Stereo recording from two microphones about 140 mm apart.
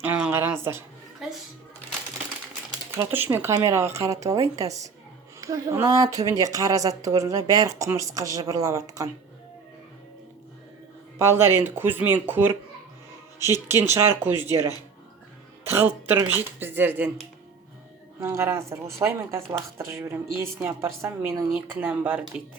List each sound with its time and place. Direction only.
0.0 s a woman's voice: 15° right (ahead or behind)
1.2 s a woman's voice: centre (ahead or behind)
3.0 s a woman's voice: 15° right (ahead or behind)
11.2 s a woman's voice: 20° right (ahead or behind)
18.2 s a woman's voice: 20° right (ahead or behind)